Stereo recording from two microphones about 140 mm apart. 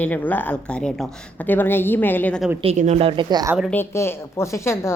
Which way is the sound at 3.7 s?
15° left (ahead or behind).